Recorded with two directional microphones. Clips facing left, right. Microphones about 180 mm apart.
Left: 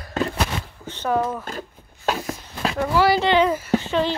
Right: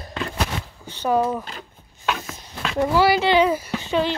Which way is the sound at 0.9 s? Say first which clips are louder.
Right 2 dB; 10° right (ahead or behind).